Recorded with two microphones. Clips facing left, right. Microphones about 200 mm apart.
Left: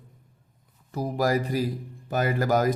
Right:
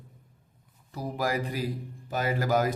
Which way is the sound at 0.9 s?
40° left (ahead or behind).